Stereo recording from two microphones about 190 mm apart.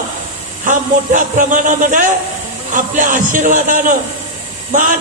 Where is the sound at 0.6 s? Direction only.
45° right (ahead or behind).